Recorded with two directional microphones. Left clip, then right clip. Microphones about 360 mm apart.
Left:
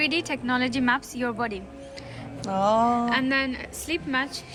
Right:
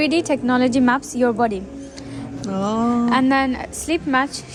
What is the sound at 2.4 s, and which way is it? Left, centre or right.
Speech, centre.